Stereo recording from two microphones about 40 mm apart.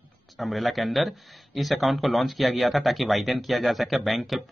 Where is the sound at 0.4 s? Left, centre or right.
Centre.